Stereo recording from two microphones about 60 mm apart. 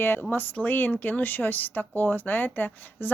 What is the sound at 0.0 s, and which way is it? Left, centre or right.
Speech, left.